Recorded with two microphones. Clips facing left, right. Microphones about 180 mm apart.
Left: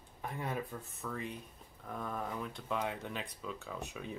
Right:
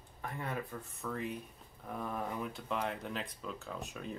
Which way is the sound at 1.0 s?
Centre (ahead or behind).